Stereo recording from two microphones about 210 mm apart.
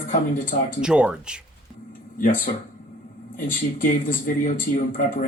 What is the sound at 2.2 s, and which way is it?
Speech, 40° left (ahead or behind).